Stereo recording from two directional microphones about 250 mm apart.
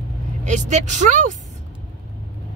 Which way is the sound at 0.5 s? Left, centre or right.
Right.